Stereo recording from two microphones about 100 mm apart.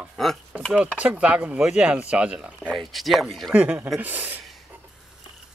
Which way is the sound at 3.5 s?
15° right (ahead or behind).